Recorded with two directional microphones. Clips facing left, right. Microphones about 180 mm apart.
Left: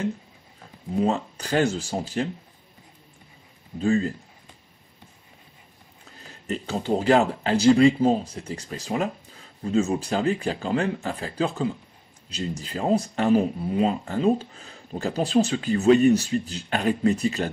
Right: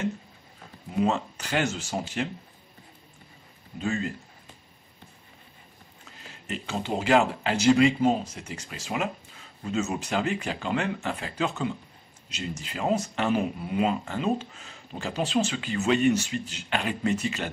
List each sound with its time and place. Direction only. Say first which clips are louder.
0.9 s speech: left 2 dB; 35° left (ahead or behind)
3.8 s speech: left 7 dB; 35° left (ahead or behind)
6.4 s speech: left 4 dB; 40° left (ahead or behind)